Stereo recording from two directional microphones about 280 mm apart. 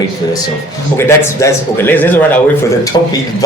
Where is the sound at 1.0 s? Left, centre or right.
Centre.